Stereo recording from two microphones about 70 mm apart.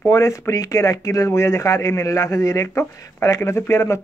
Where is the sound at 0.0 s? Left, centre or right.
Left.